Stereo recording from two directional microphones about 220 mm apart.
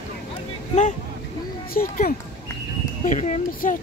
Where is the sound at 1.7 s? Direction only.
40° left (ahead or behind).